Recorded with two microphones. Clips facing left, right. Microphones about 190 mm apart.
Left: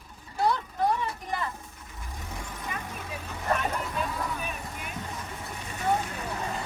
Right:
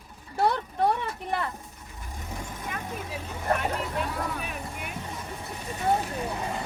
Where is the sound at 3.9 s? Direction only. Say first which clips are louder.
Right 1 dB; 65° right (ahead or behind).